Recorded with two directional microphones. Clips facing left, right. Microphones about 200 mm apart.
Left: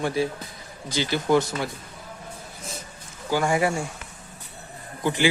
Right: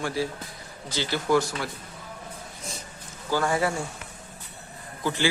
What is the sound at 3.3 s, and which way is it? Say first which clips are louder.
Speech: left 2 dB; 15° left (ahead or behind).